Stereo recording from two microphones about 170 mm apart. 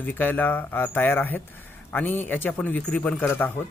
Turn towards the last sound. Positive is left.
turn(degrees=10)  # may be behind; listen again after turning